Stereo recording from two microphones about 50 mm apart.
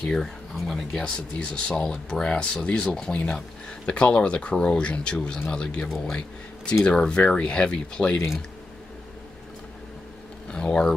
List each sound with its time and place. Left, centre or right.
0.0 s speech: centre
5.9 s speech: centre
6.1 s speech: left
10.5 s speech: centre